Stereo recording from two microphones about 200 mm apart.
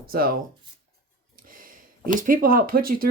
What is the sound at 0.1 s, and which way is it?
Speech, 50° right (ahead or behind).